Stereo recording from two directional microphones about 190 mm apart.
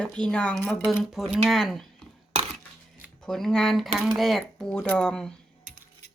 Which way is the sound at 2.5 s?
Centre (ahead or behind).